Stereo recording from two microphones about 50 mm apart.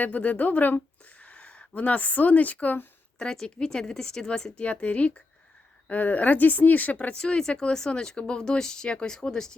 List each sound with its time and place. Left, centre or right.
0.0 s speech: left
1.2 s speech: left
3.4 s speech: centre; by 7.2 s left
7.2 s speech: centre